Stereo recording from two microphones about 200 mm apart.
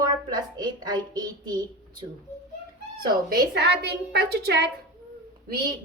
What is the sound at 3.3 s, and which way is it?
A woman's voice, 50° right (ahead or behind).